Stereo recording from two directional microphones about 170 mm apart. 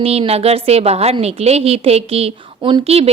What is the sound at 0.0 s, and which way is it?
A woman's voice, 35° right (ahead or behind).